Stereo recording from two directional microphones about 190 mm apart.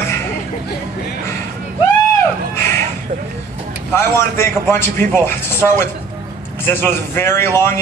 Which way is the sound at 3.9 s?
10° left (ahead or behind).